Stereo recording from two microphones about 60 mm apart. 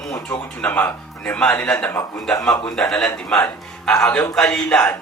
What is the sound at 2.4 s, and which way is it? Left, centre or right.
Speech, centre.